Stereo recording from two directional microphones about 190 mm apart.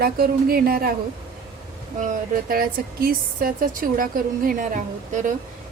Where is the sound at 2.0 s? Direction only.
45° right (ahead or behind).